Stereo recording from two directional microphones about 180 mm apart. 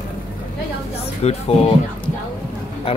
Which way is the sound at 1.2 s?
35° left (ahead or behind).